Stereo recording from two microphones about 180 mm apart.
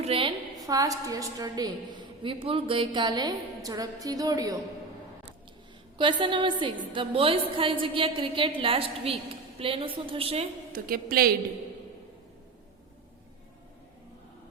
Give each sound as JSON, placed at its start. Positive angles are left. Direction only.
{"t": 0.0, "sound": "a woman's voice", "side_deg": -30}
{"t": 6.0, "sound": "a woman's voice", "side_deg": -25}
{"t": 10.7, "sound": "a woman's voice", "side_deg": -55}